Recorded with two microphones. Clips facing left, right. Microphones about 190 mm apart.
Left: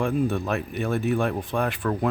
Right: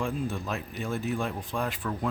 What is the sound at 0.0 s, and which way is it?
Speech, 65° left (ahead or behind).